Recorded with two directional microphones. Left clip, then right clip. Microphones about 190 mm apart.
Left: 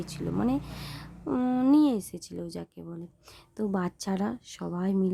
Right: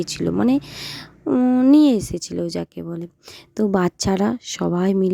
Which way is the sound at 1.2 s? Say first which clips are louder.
Right 10 dB; 25° right (ahead or behind).